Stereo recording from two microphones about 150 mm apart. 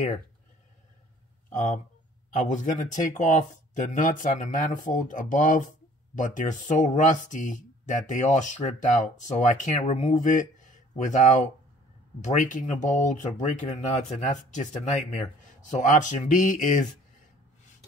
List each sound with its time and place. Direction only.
1.5 s speech: 55° left (ahead or behind)